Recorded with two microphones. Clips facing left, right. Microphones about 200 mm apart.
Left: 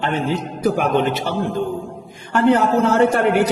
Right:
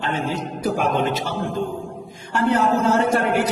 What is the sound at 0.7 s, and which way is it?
A man's voice, 60° left (ahead or behind).